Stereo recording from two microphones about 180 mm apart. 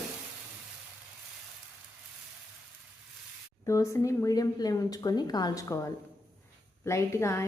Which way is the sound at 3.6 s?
15° left (ahead or behind).